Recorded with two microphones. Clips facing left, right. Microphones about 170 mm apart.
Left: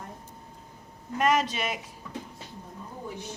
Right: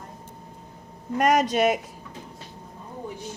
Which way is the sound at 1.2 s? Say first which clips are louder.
Right 5 dB; 45° right (ahead or behind).